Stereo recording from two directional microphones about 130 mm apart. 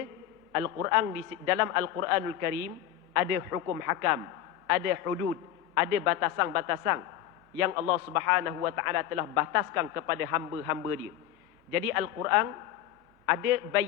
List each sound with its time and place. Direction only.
0.5 s a man's voice: 20° right (ahead or behind)